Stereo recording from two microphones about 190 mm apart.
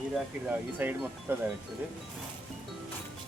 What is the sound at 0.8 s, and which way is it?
Speech, 10° right (ahead or behind).